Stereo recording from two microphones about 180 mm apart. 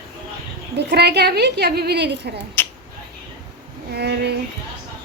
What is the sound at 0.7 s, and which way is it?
A woman's voice, 65° right (ahead or behind).